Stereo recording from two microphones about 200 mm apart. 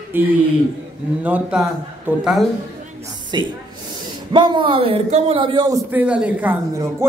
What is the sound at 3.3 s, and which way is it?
Speech, 20° right (ahead or behind).